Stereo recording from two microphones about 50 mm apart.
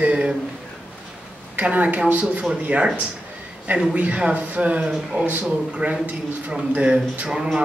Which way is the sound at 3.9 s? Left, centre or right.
Right.